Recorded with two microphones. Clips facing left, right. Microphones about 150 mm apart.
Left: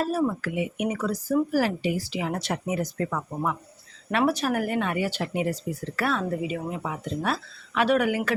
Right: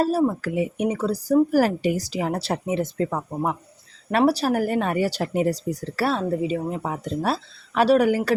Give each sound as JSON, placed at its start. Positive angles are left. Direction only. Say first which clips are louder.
{"t": 0.0, "sound": "speech", "louder": "right 4 dB", "side_deg": -35}